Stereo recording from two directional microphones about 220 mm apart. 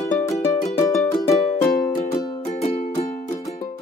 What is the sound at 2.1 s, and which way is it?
Music, 15° left (ahead or behind).